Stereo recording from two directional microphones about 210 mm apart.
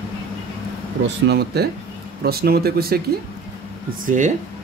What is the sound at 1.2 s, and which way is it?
Speech, 50° right (ahead or behind).